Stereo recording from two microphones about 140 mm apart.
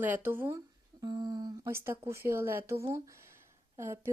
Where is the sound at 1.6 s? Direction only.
15° right (ahead or behind).